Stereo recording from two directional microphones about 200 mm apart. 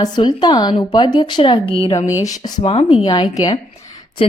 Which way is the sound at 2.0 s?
15° left (ahead or behind).